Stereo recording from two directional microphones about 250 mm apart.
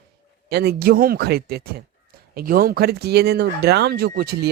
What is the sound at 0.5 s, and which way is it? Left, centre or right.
A man's voice, right.